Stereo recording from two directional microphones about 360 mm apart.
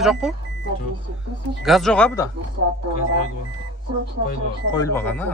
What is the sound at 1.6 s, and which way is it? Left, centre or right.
Speech, centre.